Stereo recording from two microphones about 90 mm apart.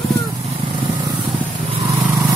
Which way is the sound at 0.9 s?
60° right (ahead or behind).